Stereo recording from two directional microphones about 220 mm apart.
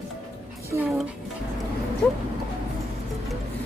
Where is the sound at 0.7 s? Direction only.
10° right (ahead or behind).